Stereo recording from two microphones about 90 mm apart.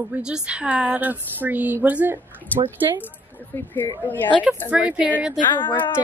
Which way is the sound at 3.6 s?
20° left (ahead or behind).